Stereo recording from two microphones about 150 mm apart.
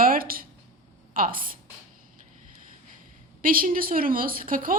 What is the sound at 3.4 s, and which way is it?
A woman's voice, 65° right (ahead or behind).